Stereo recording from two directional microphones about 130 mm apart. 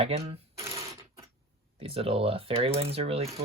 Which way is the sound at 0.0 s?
50° right (ahead or behind).